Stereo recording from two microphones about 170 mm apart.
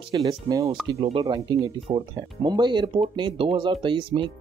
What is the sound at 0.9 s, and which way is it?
Speech, 35° right (ahead or behind).